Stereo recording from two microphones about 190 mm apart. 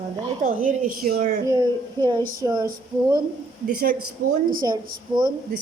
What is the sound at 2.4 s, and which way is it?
Speech, 20° right (ahead or behind).